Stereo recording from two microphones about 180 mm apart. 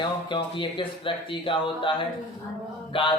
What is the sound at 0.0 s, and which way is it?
Speech, 25° left (ahead or behind).